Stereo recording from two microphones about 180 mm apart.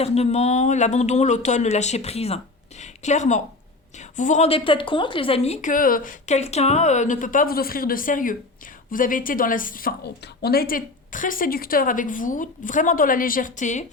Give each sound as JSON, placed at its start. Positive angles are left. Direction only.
{"t": 0.0, "sound": "a woman's voice", "side_deg": 35}